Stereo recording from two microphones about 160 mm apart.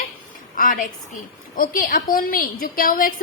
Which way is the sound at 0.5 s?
60° left (ahead or behind).